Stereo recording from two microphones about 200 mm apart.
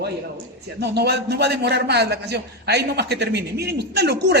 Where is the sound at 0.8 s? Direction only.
55° right (ahead or behind).